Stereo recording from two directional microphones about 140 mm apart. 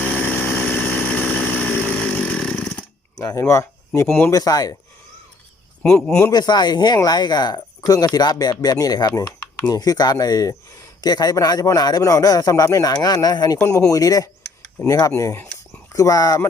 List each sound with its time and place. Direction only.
0.0 s chainsaw: 10° left (ahead or behind)
3.2 s speech: 25° left (ahead or behind)
5.8 s a man's voice: 5° left (ahead or behind)
6.3 s speech: 30° left (ahead or behind)
13.6 s speech: 15° left (ahead or behind)